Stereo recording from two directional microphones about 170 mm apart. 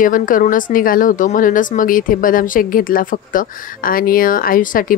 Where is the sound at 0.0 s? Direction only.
50° left (ahead or behind).